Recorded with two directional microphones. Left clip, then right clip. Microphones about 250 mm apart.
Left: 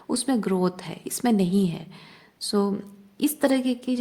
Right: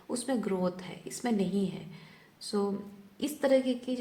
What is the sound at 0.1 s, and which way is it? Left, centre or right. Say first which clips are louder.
Speech: left 7 dB; left.